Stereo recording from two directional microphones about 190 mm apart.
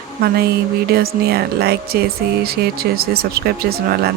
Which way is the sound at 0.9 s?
55° right (ahead or behind).